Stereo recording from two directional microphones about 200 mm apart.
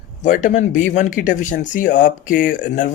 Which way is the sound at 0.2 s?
40° left (ahead or behind).